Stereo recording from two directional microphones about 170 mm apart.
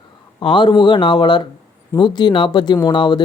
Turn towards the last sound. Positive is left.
turn(degrees=25)  # may be behind; listen again after turning